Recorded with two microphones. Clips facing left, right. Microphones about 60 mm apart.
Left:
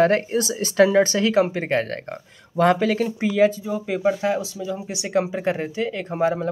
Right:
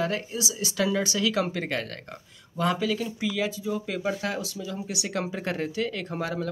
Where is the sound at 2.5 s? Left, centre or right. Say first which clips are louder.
Left 8 dB; left.